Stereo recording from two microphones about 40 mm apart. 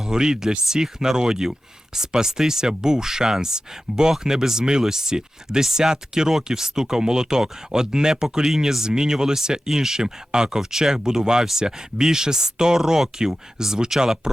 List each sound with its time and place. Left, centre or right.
0.0 s speech: centre